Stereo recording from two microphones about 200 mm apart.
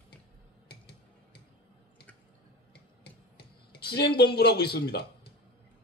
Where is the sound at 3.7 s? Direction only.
55° left (ahead or behind).